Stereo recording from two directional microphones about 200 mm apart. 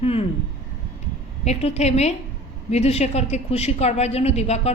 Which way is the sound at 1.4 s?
30° left (ahead or behind).